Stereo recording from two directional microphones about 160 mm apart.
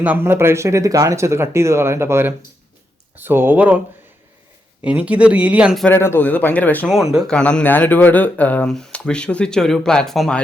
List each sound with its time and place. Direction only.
0.0 s speech: 10° right (ahead or behind)
4.8 s speech: 10° right (ahead or behind)
5.8 s a man's voice: 15° left (ahead or behind)